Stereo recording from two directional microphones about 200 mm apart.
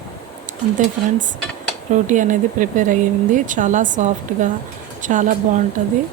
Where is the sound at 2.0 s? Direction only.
40° right (ahead or behind).